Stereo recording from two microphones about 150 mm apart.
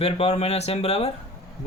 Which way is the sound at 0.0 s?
45° left (ahead or behind).